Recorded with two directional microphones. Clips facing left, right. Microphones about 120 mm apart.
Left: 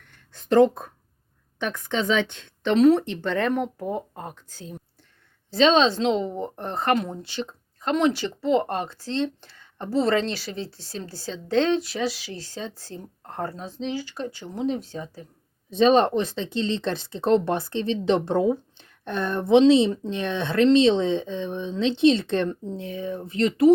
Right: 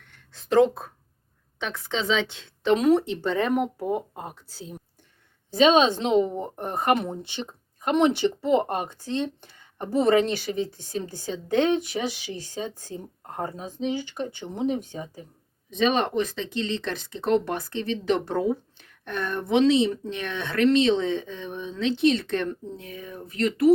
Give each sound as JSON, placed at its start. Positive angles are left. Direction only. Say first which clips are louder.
{"t": 0.3, "sound": "a woman's voice", "louder": "left 2 dB", "side_deg": 0}
{"t": 15.7, "sound": "speech", "louder": "left 5 dB", "side_deg": 35}